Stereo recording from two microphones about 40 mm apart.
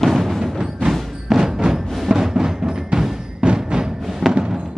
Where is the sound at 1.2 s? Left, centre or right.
Centre.